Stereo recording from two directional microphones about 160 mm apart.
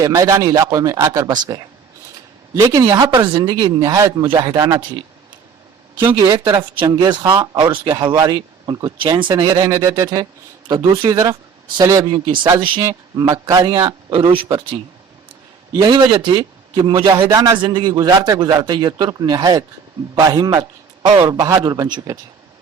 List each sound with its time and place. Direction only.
0.0 s speech: 20° right (ahead or behind)
6.0 s speech: 25° right (ahead or behind)
15.7 s speech: 25° right (ahead or behind)